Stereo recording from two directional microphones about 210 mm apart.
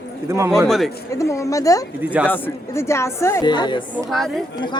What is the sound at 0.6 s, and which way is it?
Speech, centre (ahead or behind).